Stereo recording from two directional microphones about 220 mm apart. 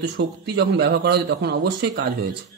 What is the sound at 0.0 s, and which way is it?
Speech, 50° right (ahead or behind).